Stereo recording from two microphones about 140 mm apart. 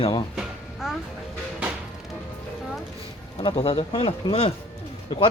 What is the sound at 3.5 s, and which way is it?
Speech, 45° left (ahead or behind).